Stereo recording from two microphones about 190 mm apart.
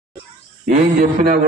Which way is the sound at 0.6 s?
45° right (ahead or behind).